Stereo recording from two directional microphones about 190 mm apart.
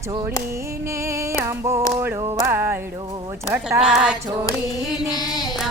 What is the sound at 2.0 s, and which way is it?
Music, 15° right (ahead or behind).